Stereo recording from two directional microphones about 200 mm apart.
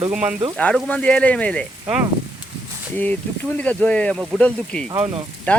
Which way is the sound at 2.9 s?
10° left (ahead or behind).